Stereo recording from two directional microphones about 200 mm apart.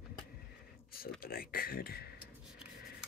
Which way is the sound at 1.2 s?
50° left (ahead or behind).